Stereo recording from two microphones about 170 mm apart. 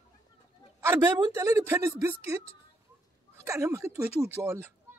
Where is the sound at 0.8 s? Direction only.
15° right (ahead or behind).